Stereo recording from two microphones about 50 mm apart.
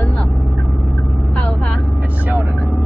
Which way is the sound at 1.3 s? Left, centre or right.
Left.